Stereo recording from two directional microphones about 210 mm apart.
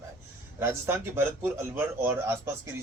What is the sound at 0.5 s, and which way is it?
Speech, 10° right (ahead or behind).